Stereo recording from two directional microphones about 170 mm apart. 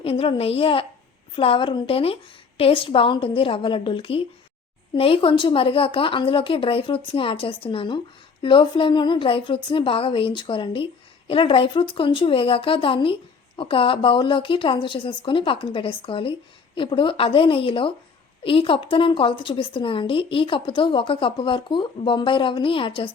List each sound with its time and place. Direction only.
0.0 s a woman's voice: 35° left (ahead or behind)